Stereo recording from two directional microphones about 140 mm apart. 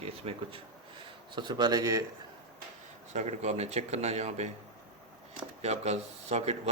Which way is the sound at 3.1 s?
55° right (ahead or behind).